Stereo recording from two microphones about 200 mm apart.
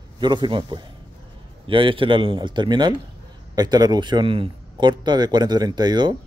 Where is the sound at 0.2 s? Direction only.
25° right (ahead or behind).